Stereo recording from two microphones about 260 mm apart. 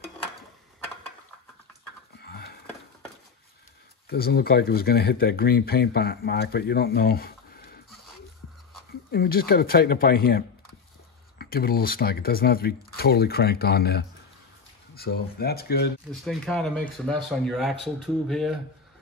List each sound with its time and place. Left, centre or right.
2.1 s a sound: left
4.1 s speech: left
9.1 s speech: left
16.1 s speech: centre